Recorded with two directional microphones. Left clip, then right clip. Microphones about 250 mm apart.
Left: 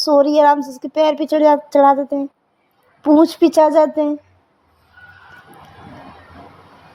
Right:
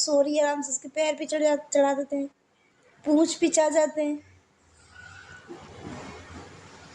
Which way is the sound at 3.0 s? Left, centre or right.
Left.